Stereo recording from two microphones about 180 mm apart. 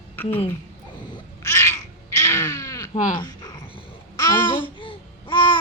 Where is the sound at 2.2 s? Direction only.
15° left (ahead or behind).